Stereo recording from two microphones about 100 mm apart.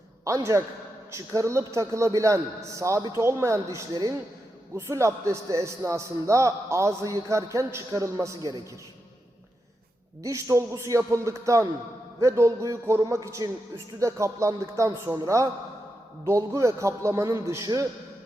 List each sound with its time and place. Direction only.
0.3 s a man's voice: 35° right (ahead or behind)
10.2 s a man's voice: 25° right (ahead or behind)